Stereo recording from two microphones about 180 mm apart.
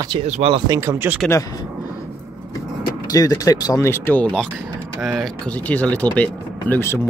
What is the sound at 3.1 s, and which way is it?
Speech, 20° left (ahead or behind).